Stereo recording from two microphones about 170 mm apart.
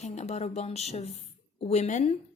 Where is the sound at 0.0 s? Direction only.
40° left (ahead or behind).